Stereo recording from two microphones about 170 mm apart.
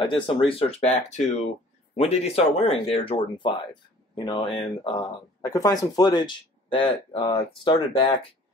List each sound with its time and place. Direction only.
0.3 s speech: 35° left (ahead or behind)